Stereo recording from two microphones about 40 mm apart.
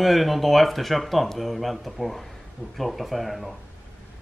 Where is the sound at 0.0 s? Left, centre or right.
Centre.